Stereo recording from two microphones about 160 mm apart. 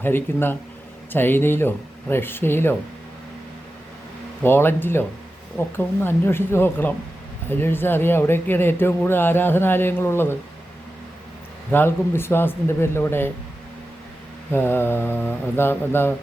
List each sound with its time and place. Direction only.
0.0 s speech: 15° left (ahead or behind)
4.4 s speech: 15° left (ahead or behind)
11.7 s speech: 15° left (ahead or behind)
14.5 s speech: 15° left (ahead or behind)